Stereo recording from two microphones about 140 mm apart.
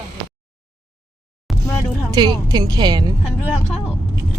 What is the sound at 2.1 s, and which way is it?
Speech, 30° right (ahead or behind).